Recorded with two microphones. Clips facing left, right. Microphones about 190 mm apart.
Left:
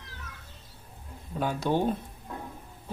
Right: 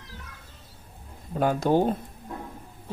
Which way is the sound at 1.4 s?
45° right (ahead or behind).